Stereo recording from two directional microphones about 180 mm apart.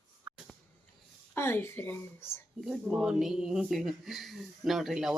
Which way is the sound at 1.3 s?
15° left (ahead or behind).